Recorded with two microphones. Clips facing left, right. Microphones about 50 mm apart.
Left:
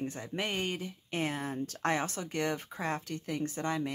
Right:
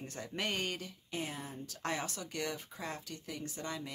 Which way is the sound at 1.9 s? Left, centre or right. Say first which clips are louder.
Left 6 dB; left.